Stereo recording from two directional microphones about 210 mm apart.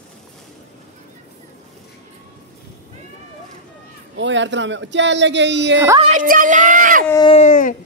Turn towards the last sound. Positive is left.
turn(degrees=40)  # may be behind; listen again after turning